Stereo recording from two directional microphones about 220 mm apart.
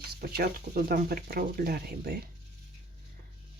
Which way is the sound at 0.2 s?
45° right (ahead or behind).